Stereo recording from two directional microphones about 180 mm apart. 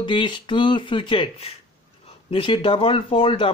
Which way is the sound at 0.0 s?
25° left (ahead or behind).